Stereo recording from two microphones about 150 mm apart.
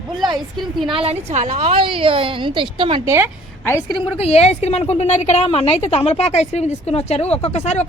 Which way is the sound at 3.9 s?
35° left (ahead or behind).